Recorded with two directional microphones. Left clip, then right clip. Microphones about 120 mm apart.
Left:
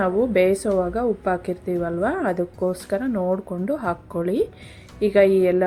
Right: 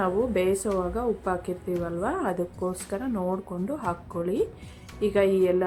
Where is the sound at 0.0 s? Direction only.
35° left (ahead or behind).